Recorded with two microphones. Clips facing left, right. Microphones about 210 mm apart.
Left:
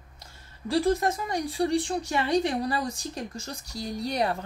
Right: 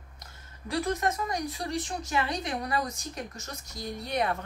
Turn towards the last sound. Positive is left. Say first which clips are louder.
# left 2 dB
turn(degrees=35)  # may be behind; listen again after turning